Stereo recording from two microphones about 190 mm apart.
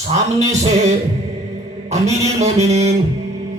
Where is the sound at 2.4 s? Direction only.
35° right (ahead or behind).